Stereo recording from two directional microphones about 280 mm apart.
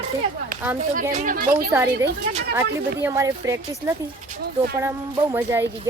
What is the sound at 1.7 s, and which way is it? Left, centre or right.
A woman's voice, centre.